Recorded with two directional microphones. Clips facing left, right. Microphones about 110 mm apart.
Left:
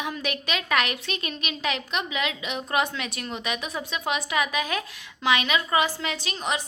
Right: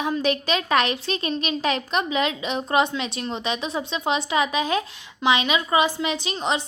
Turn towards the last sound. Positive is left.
turn(degrees=-25)  # may be behind; listen again after turning